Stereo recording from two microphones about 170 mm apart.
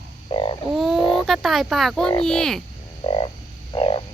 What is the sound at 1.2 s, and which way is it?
Speech, centre (ahead or behind).